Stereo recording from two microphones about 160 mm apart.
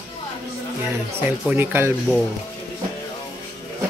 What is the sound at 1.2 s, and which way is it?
Speech, 15° right (ahead or behind).